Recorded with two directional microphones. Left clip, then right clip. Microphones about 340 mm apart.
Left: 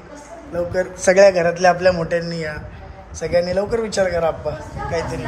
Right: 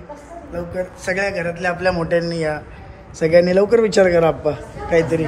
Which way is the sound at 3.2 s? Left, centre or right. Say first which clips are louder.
Right 5 dB; right.